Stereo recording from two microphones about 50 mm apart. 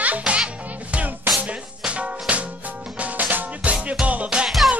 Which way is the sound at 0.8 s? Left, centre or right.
Right.